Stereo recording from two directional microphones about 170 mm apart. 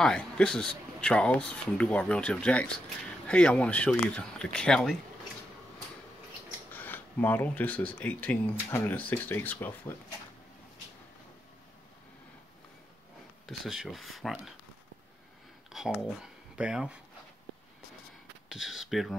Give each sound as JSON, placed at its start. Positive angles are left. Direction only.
{"t": 0.0, "sound": "speech", "side_deg": 5}
{"t": 6.7, "sound": "speech", "side_deg": 10}
{"t": 13.5, "sound": "speech", "side_deg": 0}
{"t": 15.7, "sound": "speech", "side_deg": 0}
{"t": 18.5, "sound": "speech", "side_deg": 0}